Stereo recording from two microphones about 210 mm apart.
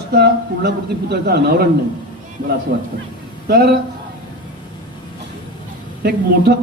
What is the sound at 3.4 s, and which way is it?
Speech, 45° right (ahead or behind).